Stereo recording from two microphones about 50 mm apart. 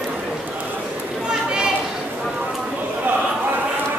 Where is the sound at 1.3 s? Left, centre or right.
Centre.